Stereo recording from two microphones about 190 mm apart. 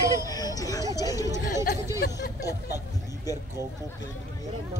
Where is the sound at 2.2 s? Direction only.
55° left (ahead or behind).